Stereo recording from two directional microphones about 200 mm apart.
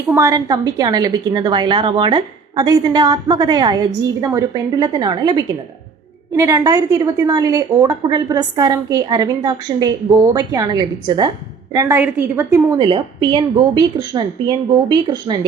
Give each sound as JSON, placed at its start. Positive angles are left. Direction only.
{"t": 0.1, "sound": "a woman's voice", "side_deg": -15}